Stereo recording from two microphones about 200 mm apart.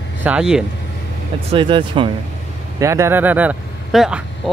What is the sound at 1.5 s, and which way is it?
Speech, 25° right (ahead or behind).